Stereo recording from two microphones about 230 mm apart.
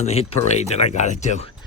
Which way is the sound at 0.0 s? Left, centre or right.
Left.